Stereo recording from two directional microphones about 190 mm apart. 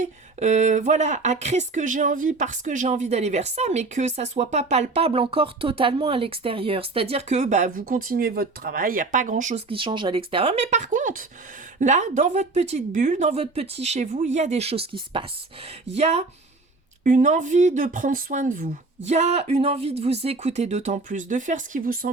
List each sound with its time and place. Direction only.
0.0 s speech: 40° right (ahead or behind)